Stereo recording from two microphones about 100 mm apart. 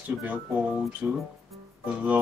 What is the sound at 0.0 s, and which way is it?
Speech, 15° right (ahead or behind).